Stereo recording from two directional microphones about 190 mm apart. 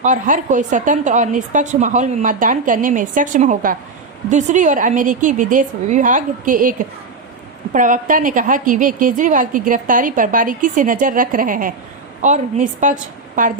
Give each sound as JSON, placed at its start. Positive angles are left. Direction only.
{"t": 0.0, "sound": "a woman's voice", "side_deg": -40}